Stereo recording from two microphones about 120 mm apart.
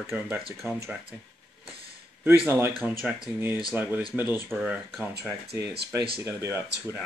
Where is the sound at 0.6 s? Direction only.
Centre (ahead or behind).